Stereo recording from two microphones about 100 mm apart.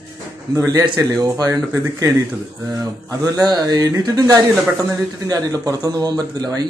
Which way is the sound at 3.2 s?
40° right (ahead or behind).